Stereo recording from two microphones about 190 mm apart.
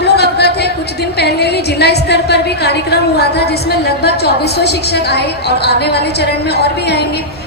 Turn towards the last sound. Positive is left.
turn(degrees=60)  # may be behind; listen again after turning